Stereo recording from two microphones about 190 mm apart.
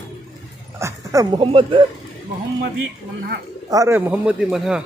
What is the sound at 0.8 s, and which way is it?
Speech, 15° right (ahead or behind).